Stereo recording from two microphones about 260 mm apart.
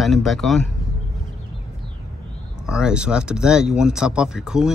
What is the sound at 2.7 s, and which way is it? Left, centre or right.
Speech, centre.